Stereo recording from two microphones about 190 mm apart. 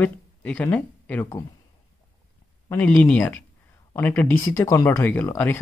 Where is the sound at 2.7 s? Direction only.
10° left (ahead or behind).